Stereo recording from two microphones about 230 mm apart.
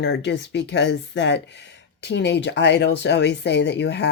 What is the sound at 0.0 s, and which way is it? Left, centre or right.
Speech, left.